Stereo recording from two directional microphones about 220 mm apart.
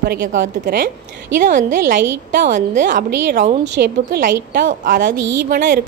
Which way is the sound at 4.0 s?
50° right (ahead or behind).